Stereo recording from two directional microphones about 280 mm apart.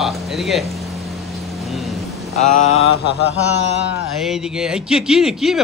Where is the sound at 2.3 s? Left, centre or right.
Left.